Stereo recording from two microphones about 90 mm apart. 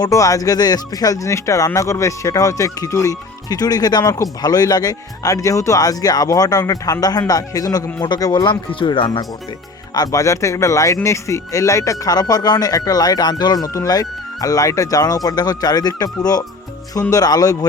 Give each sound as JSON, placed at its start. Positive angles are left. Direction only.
{"t": 0.0, "sound": "speech", "side_deg": 40}
{"t": 8.3, "sound": "speech", "side_deg": 55}
{"t": 9.9, "sound": "speech", "side_deg": 45}